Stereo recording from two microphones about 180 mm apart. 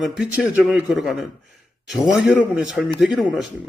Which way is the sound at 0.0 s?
Centre (ahead or behind).